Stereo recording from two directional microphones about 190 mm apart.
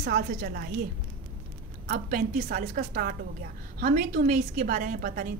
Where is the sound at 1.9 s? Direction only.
50° right (ahead or behind).